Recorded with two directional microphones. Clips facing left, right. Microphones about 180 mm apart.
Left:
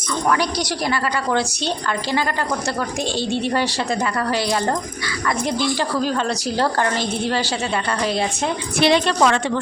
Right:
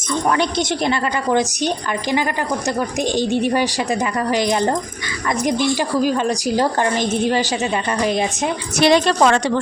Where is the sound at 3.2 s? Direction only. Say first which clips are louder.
Right 3 dB; 15° right (ahead or behind).